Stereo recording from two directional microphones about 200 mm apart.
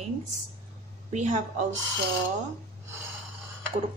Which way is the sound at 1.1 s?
35° right (ahead or behind).